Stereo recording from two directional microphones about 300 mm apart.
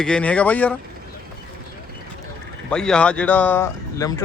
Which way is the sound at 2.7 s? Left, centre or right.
Centre.